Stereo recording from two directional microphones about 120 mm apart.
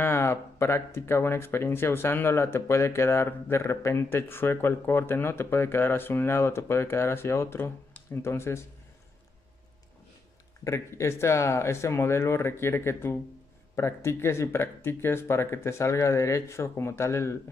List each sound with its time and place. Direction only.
0.0 s speech: 20° left (ahead or behind)
10.6 s speech: 25° left (ahead or behind)